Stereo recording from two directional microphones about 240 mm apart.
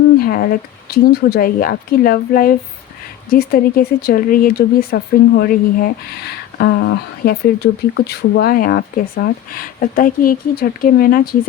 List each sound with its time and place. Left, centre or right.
0.2 s speech: left